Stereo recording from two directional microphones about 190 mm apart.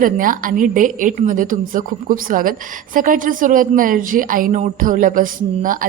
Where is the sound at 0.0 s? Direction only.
45° right (ahead or behind).